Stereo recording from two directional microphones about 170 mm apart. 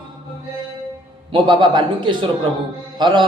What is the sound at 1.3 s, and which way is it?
Speech, 25° right (ahead or behind).